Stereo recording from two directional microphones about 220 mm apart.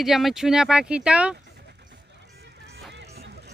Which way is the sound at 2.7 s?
50° right (ahead or behind).